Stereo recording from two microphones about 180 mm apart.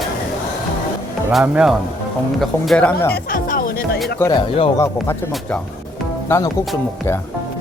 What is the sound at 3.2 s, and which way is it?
Music, 50° left (ahead or behind).